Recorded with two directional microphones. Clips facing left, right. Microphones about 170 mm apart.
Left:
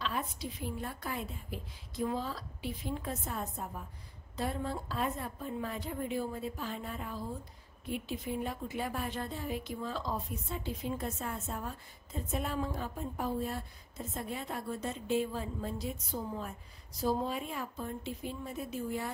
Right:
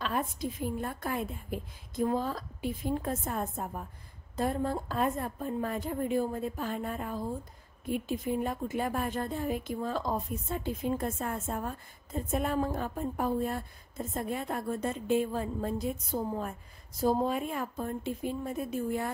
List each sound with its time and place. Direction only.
0.0 s a woman's voice: 50° right (ahead or behind)